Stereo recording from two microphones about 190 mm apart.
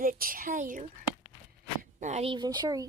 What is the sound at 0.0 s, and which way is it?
Female singing, 50° right (ahead or behind).